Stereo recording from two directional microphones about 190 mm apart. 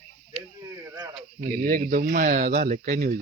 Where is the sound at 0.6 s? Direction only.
15° right (ahead or behind).